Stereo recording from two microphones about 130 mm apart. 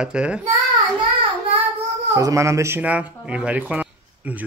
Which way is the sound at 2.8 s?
10° right (ahead or behind).